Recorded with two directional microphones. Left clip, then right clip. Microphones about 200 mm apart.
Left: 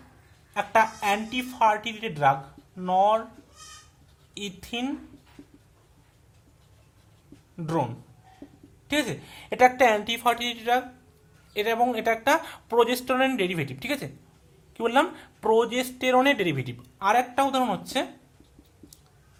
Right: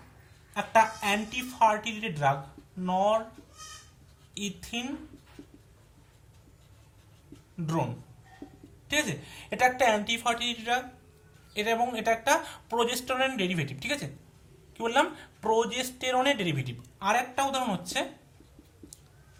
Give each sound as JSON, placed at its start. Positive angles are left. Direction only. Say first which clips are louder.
{"t": 0.5, "sound": "speech", "louder": "left 1 dB", "side_deg": 40}
{"t": 4.4, "sound": "speech", "louder": "left 3 dB", "side_deg": 40}
{"t": 8.9, "sound": "speech", "louder": "left 2 dB", "side_deg": 40}